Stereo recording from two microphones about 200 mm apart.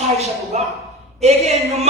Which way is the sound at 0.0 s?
35° right (ahead or behind).